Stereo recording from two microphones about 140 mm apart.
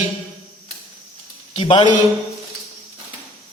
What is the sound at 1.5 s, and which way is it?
Speech, 35° left (ahead or behind).